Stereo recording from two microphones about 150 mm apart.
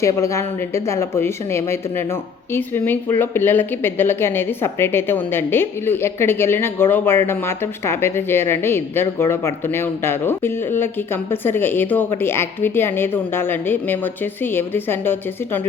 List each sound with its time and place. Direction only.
0.0 s speech: 20° left (ahead or behind)